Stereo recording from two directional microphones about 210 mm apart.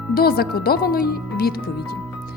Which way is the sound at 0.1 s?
45° left (ahead or behind).